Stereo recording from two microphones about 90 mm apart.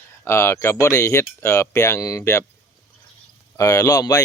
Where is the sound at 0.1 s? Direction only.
30° left (ahead or behind).